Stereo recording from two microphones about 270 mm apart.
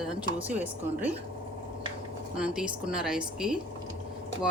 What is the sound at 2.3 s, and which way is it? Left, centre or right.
Speech, centre.